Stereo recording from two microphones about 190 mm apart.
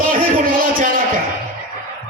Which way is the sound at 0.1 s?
50° right (ahead or behind).